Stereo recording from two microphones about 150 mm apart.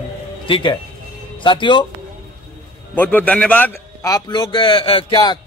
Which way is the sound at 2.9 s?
10° left (ahead or behind).